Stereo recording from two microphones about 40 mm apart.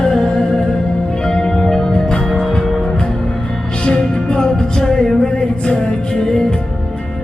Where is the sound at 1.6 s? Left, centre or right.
Centre.